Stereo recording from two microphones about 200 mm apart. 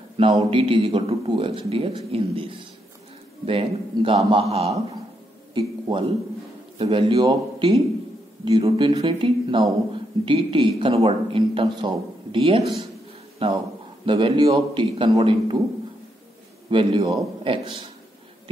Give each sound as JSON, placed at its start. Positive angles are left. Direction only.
{"t": 0.4, "sound": "speech", "side_deg": -25}
{"t": 16.7, "sound": "speech", "side_deg": -25}